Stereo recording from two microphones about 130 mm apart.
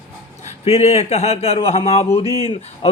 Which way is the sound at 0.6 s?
50° left (ahead or behind).